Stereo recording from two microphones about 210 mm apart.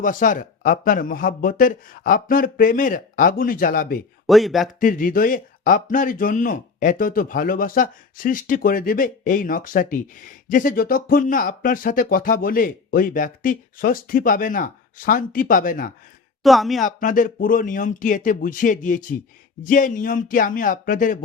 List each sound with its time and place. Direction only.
0.0 s speech: 40° left (ahead or behind)
4.3 s speech: centre (ahead or behind)
4.8 s speech: 40° left (ahead or behind)
16.4 s speech: centre (ahead or behind)
16.8 s speech: 40° left (ahead or behind)